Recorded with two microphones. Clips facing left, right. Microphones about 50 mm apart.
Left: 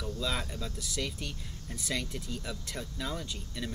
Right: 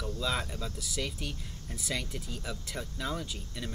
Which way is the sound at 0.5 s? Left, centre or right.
Centre.